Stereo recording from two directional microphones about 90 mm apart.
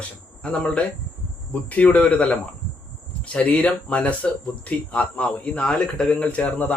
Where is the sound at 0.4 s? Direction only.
10° left (ahead or behind).